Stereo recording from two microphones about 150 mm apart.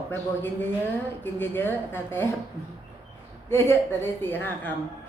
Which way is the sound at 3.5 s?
15° left (ahead or behind).